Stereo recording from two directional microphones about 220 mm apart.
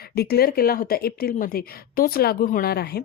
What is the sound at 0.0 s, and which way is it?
A woman's voice, 45° left (ahead or behind).